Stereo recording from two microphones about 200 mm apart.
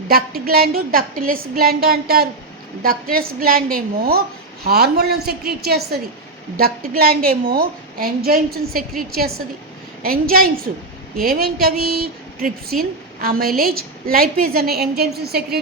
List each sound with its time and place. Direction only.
0.1 s a woman's voice: 50° right (ahead or behind)